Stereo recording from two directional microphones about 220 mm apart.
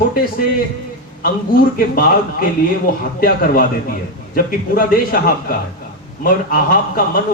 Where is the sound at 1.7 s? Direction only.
40° left (ahead or behind).